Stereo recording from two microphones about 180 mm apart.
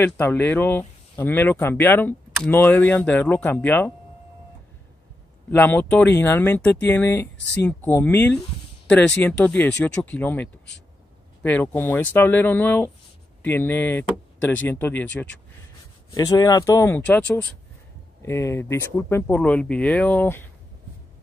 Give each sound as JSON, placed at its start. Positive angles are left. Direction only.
{"t": 0.0, "sound": "speech", "side_deg": 10}
{"t": 5.5, "sound": "speech", "side_deg": 10}
{"t": 16.1, "sound": "speech", "side_deg": 20}